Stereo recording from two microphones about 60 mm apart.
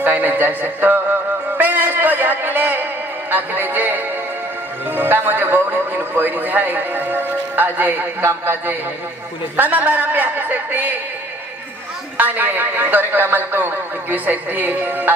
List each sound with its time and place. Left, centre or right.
0.0 s a man's voice: right
1.6 s music: right
4.9 s a man's voice: right
12.2 s a man's voice: right